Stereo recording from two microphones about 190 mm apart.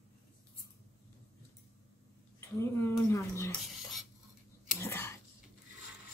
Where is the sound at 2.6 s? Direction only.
15° left (ahead or behind).